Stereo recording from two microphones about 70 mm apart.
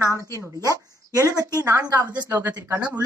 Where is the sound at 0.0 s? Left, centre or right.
Right.